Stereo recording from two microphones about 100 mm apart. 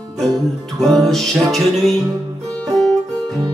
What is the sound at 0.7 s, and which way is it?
Music, centre (ahead or behind).